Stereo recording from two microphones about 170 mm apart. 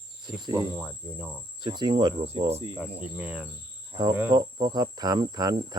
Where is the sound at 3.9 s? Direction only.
25° right (ahead or behind).